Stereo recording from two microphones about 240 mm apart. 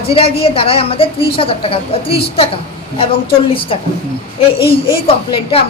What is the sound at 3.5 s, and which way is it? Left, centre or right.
A woman's voice, left.